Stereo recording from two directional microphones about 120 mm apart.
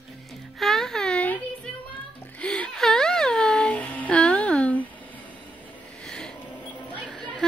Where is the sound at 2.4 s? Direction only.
10° left (ahead or behind).